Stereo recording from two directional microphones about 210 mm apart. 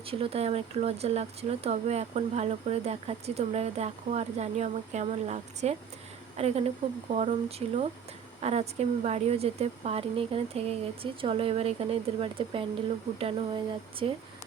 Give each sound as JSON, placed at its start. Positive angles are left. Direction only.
{"t": 0.1, "sound": "a woman's voice", "side_deg": -30}